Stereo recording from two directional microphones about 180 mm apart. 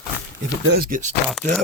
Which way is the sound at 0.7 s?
50° right (ahead or behind).